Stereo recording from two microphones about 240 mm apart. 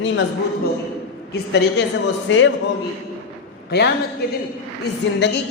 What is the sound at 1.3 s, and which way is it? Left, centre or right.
Speech, left.